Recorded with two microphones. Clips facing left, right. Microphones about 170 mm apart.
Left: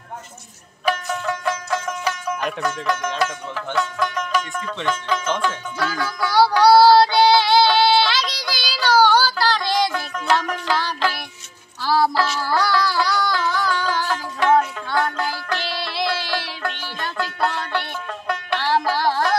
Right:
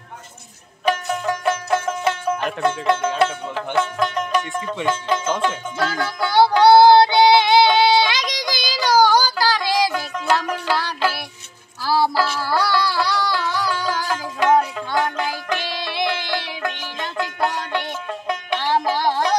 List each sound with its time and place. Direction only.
1.4 s music: 25° right (ahead or behind)
2.6 s speech: 25° right (ahead or behind)
5.8 s music: 25° right (ahead or behind)